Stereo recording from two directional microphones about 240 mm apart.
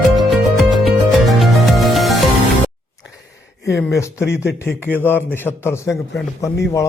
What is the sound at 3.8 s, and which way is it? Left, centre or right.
Speech, centre.